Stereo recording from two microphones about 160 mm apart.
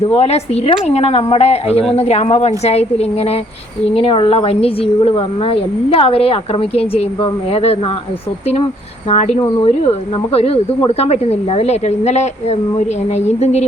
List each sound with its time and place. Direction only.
0.1 s a woman's voice: 40° left (ahead or behind)
9.0 s speech: 45° left (ahead or behind)
10.3 s a woman's voice: 40° left (ahead or behind)